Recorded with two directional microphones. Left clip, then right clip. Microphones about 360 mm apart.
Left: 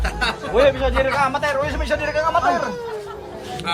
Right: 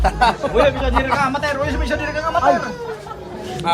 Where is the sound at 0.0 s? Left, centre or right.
Centre.